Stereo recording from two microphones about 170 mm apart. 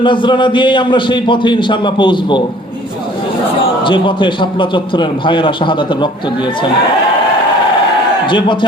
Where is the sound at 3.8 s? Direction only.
30° left (ahead or behind).